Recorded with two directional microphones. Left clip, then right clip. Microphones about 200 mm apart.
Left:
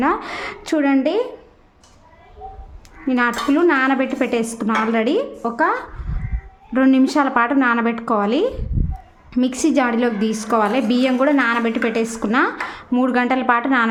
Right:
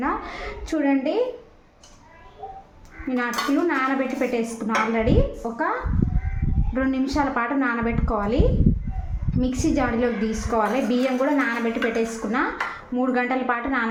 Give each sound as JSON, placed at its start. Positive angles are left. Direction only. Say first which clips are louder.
{"t": 0.0, "sound": "a woman's voice", "louder": "left 7 dB", "side_deg": 40}
{"t": 3.1, "sound": "speech", "louder": "left 6 dB", "side_deg": 45}
{"t": 6.7, "sound": "a woman's voice", "louder": "left 8 dB", "side_deg": 40}